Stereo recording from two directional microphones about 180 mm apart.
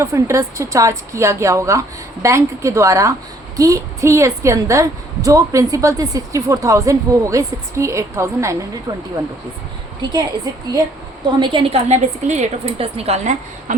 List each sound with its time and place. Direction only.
0.0 s a woman's voice: 15° right (ahead or behind)
11.3 s a woman's voice: 25° right (ahead or behind)
11.9 s a woman's voice: 40° right (ahead or behind)